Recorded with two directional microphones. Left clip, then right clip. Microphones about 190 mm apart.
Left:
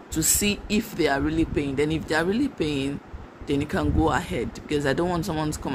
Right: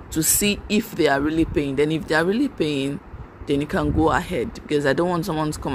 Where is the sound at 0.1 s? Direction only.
15° right (ahead or behind).